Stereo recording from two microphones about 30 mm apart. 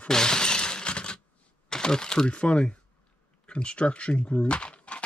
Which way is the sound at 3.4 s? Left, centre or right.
Left.